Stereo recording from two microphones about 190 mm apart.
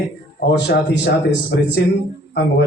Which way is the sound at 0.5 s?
60° left (ahead or behind).